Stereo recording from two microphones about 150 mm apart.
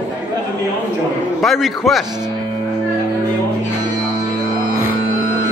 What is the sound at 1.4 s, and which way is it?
Speech, centre (ahead or behind).